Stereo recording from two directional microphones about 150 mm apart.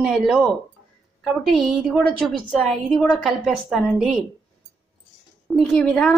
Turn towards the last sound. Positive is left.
turn(degrees=5)  # may be behind; listen again after turning